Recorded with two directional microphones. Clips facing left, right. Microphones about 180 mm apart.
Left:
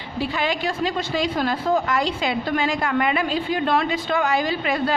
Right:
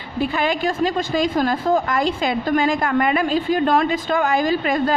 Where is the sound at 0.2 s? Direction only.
50° right (ahead or behind).